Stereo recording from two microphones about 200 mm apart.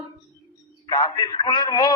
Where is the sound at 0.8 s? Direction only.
25° left (ahead or behind).